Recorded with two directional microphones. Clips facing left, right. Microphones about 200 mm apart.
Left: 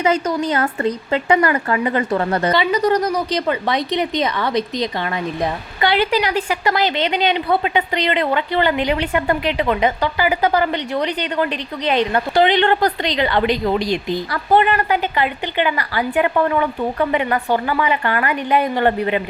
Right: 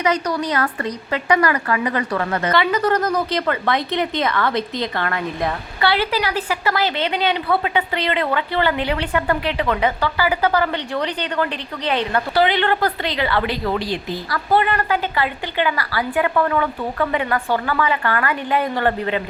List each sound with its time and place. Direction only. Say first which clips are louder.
0.0 s a woman's voice: left 2 dB; 25° left (ahead or behind)
2.5 s a woman's voice: left 1 dB; 15° left (ahead or behind)